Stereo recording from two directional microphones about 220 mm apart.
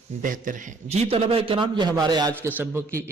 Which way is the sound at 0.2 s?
35° right (ahead or behind).